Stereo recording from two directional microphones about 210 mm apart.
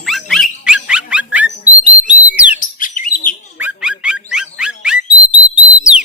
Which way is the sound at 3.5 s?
5° right (ahead or behind).